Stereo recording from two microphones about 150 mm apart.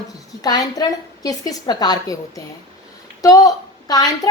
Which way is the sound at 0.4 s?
25° left (ahead or behind).